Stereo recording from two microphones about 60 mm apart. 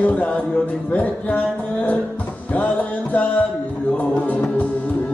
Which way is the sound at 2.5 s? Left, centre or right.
Left.